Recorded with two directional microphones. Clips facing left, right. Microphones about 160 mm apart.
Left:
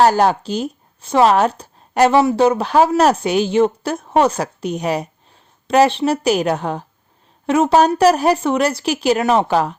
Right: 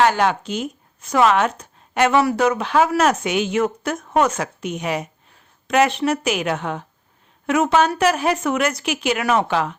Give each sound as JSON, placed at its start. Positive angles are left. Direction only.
{"t": 0.0, "sound": "speech", "side_deg": 35}
{"t": 9.5, "sound": "speech", "side_deg": 40}